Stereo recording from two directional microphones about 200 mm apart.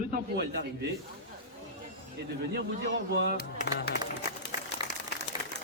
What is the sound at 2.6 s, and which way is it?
Speech, 55° right (ahead or behind).